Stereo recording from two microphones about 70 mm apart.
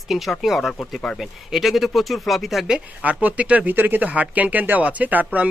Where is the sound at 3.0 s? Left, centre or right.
Right.